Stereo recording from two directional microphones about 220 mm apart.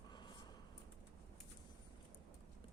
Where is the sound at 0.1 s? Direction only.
20° left (ahead or behind).